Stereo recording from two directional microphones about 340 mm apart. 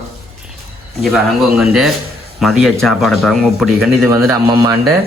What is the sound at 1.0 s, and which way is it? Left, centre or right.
Speech, centre.